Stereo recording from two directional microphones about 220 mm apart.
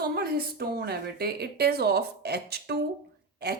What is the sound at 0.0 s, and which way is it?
A woman's voice, 45° right (ahead or behind).